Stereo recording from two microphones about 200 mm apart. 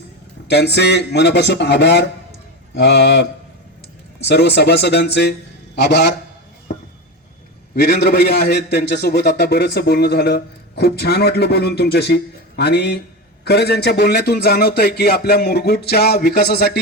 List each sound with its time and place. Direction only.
0.4 s a man's voice: 55° left (ahead or behind)
4.3 s a man's voice: 55° left (ahead or behind)
7.8 s a man's voice: 55° left (ahead or behind)